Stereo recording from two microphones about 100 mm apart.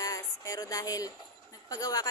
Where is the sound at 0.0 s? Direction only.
35° left (ahead or behind).